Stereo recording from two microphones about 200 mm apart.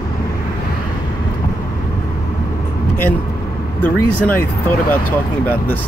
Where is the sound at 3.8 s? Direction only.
10° left (ahead or behind).